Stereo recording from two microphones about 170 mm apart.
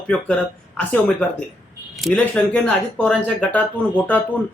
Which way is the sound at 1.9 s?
Centre (ahead or behind).